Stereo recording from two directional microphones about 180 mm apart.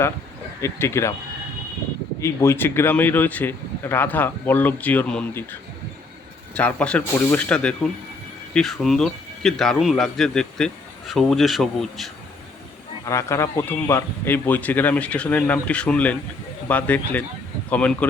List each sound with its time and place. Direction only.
0.6 s speech: 15° left (ahead or behind)
2.2 s a man's voice: 15° left (ahead or behind)
13.1 s speech: 15° left (ahead or behind)